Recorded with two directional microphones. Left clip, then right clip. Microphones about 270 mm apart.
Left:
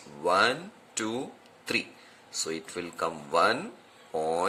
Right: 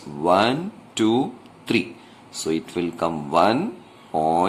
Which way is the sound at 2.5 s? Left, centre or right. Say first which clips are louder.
Right 10 dB; centre.